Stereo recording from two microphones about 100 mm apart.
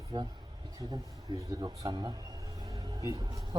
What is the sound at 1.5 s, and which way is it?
Speech, 40° right (ahead or behind).